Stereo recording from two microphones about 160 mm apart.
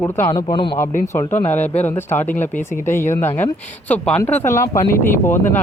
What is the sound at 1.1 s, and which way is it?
Speech, 15° left (ahead or behind).